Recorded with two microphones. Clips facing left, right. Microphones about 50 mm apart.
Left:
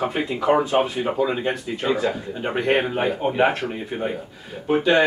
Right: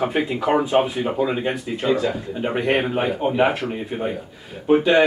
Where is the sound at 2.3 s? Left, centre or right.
Centre.